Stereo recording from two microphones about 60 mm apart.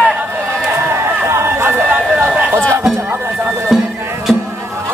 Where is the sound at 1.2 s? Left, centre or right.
Right.